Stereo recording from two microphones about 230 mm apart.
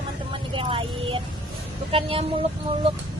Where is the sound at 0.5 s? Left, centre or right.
Right.